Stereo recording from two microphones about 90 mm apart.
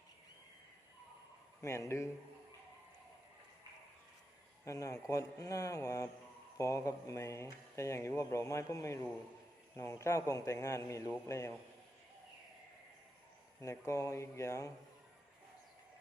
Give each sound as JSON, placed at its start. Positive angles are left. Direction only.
{"t": 1.6, "sound": "speech", "side_deg": 35}
{"t": 4.6, "sound": "speech", "side_deg": 40}
{"t": 13.6, "sound": "speech", "side_deg": 35}